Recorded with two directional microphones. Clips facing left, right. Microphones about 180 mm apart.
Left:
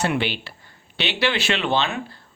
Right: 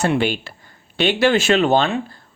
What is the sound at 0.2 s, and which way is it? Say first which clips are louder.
Speech: right 5 dB; 45° right (ahead or behind).